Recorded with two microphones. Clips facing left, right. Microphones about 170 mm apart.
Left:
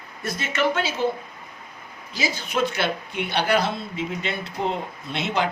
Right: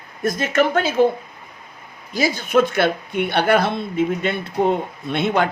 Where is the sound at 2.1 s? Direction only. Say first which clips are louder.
Right 9 dB; 50° right (ahead or behind).